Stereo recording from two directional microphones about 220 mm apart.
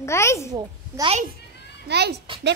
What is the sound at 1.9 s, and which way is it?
Speech, 50° right (ahead or behind).